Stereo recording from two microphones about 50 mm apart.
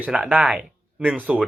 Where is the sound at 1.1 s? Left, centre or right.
Right.